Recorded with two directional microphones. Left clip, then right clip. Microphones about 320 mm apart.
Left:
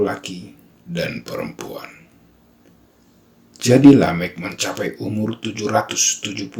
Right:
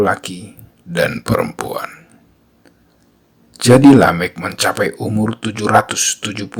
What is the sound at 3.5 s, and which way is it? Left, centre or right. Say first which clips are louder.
Speech: right 3 dB; right.